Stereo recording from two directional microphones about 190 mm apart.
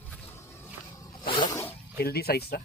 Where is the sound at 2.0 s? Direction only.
55° left (ahead or behind).